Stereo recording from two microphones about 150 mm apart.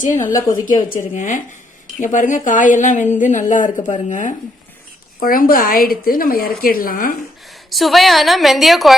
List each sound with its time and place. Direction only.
0.0 s a woman's voice: 60° left (ahead or behind)
5.2 s a woman's voice: 70° left (ahead or behind)
7.7 s a woman's voice: centre (ahead or behind)